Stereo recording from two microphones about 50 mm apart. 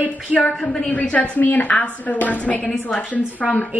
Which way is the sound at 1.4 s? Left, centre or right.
Left.